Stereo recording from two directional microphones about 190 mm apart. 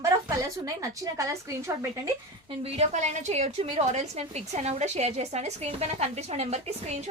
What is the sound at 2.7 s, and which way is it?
A woman's voice, 35° right (ahead or behind).